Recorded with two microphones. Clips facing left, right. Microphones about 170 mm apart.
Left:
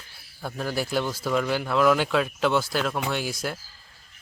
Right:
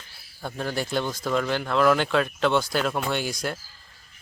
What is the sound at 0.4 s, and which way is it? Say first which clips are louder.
Speech: even; 5° left (ahead or behind).